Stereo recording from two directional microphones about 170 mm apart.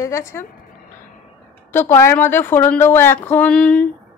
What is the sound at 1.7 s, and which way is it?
A woman's voice, 15° left (ahead or behind).